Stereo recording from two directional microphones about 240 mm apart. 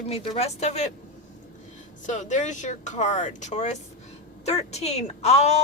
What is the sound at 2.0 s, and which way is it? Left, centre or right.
A woman's voice, left.